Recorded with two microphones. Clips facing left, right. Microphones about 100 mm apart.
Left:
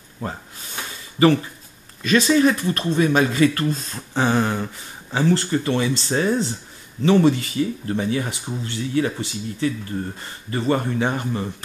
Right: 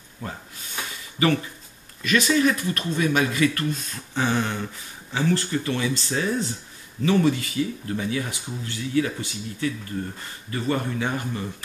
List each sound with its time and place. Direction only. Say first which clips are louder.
1.2 s speech: left 6 dB; 30° left (ahead or behind)